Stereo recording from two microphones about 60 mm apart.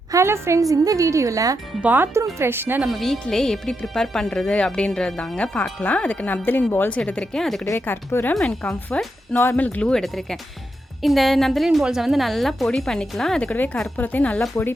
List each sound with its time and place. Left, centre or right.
0.1 s a woman's voice: right
0.6 s a woman's voice: right
1.8 s speech: right
2.1 s speech: right
2.9 s speech: centre
5.8 s speech: left
7.0 s speech: centre
7.4 s a woman's voice: centre
7.8 s speech: left
8.3 s speech: centre
9.8 s a woman's voice: centre
13.4 s speech: left